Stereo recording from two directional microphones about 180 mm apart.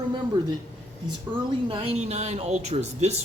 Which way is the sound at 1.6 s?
30° right (ahead or behind).